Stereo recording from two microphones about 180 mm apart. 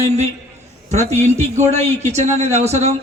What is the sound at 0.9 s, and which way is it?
A man's voice, 40° right (ahead or behind).